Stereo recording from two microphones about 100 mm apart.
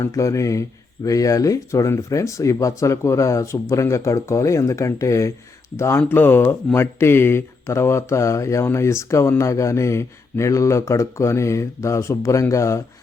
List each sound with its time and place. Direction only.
0.0 s speech: 30° left (ahead or behind)